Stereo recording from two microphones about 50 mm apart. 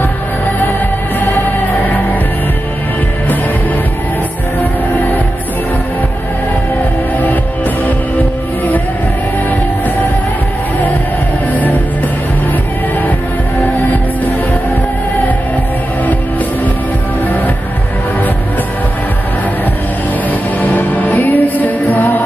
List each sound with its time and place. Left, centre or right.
1.7 s music: left
4.6 s music: left
11.5 s music: left
20.6 s music: left